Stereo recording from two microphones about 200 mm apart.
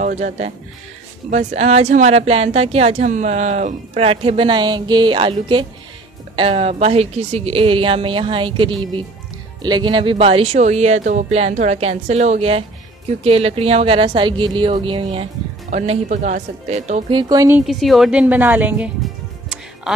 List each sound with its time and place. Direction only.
0.0 s a woman's voice: 35° right (ahead or behind)
17.2 s a woman's voice: 20° right (ahead or behind)
17.6 s a woman's voice: centre (ahead or behind)